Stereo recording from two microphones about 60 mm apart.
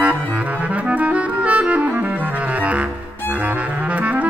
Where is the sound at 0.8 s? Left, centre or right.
Right.